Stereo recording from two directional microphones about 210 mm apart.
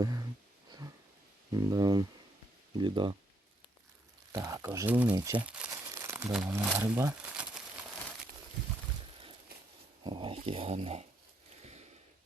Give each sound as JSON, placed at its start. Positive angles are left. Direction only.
{"t": 0.0, "sound": "a sound", "side_deg": -15}
{"t": 1.5, "sound": "speech", "side_deg": -20}
{"t": 4.3, "sound": "speech", "side_deg": -15}
{"t": 5.1, "sound": "speech", "side_deg": -20}
{"t": 5.4, "sound": "speech", "side_deg": -5}
{"t": 5.7, "sound": "crumpling", "side_deg": -15}
{"t": 10.0, "sound": "speech", "side_deg": -25}
{"t": 11.6, "sound": "a sound", "side_deg": -30}